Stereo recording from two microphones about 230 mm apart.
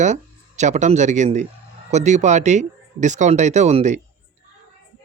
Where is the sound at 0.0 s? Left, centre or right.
Right.